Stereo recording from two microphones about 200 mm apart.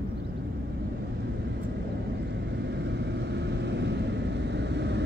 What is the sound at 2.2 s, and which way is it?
Vehicle, 60° right (ahead or behind).